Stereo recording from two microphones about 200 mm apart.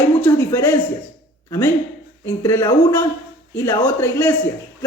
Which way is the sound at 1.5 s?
15° left (ahead or behind).